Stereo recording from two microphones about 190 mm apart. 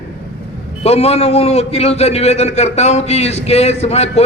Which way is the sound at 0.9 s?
35° left (ahead or behind).